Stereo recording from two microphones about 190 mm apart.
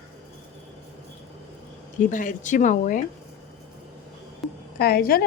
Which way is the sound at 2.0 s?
40° left (ahead or behind).